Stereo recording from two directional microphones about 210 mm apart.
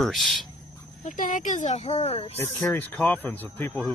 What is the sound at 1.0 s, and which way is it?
Speech, 40° left (ahead or behind).